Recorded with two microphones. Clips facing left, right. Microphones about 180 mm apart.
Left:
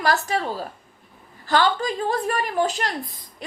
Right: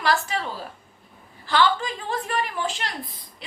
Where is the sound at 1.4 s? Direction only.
45° left (ahead or behind).